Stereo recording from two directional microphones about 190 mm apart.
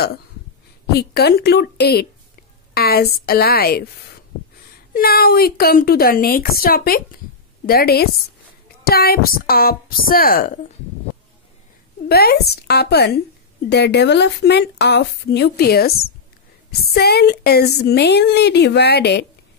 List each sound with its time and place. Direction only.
0.9 s a woman's voice: 55° left (ahead or behind)
12.1 s a woman's voice: 55° left (ahead or behind)
16.9 s a woman's voice: 60° left (ahead or behind)